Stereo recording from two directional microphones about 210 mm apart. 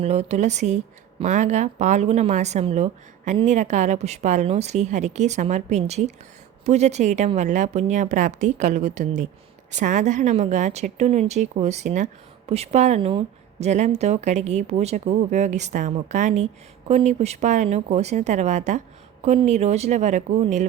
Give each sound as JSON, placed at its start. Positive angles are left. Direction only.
{"t": 0.0, "sound": "a woman's voice", "side_deg": -30}